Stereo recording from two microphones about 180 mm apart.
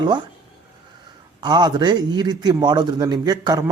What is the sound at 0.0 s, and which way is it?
Speech, 25° right (ahead or behind).